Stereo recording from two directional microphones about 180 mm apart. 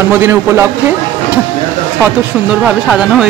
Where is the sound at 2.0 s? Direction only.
5° right (ahead or behind).